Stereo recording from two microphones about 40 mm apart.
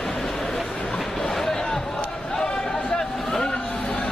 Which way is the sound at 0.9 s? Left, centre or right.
Centre.